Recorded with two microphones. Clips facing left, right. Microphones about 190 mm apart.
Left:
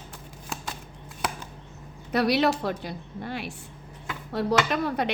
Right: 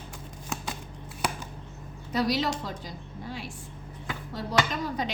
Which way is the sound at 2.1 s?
65° left (ahead or behind).